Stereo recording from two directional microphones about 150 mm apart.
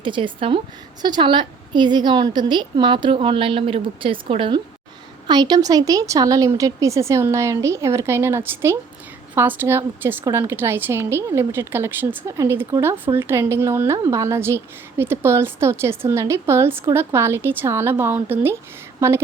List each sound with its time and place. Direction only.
0.0 s a woman's voice: 35° right (ahead or behind); by 19.2 s 20° right (ahead or behind)